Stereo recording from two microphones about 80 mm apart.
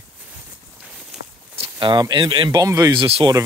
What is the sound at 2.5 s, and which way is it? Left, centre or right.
Speech, right.